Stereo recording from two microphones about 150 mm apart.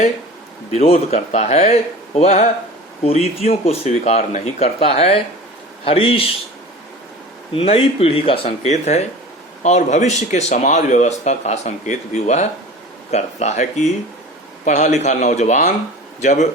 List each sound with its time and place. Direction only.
0.7 s a man's voice: 45° left (ahead or behind)
7.5 s a man's voice: 40° left (ahead or behind)